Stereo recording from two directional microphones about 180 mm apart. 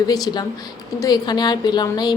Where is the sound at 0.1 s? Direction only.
20° left (ahead or behind).